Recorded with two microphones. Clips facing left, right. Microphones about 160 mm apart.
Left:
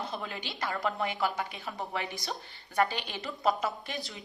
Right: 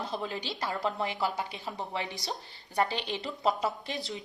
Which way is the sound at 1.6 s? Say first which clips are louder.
Even; 20° right (ahead or behind).